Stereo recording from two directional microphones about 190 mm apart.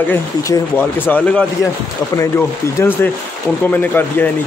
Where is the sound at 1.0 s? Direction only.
10° left (ahead or behind).